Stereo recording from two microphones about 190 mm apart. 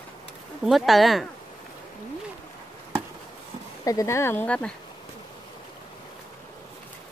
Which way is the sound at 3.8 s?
15° left (ahead or behind).